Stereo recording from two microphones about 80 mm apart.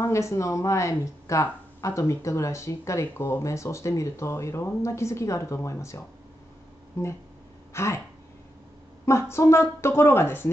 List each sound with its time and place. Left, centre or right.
0.0 s speech: left
9.0 s speech: left